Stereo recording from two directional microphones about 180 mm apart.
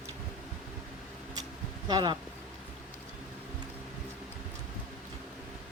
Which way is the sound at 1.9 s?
25° right (ahead or behind).